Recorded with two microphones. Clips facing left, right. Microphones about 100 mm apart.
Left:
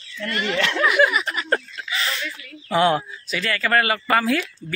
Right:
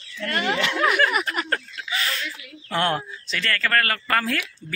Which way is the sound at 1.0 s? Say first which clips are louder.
Left 7 dB; 15° left (ahead or behind).